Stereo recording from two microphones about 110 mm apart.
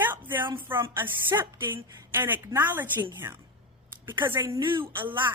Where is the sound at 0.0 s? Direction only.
20° right (ahead or behind).